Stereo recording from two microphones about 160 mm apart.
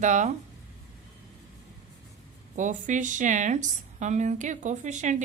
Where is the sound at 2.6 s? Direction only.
50° right (ahead or behind).